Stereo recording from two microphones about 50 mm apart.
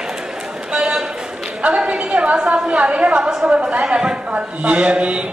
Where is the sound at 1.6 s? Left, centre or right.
Right.